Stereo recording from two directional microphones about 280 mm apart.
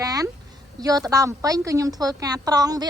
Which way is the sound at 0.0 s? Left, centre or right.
Centre.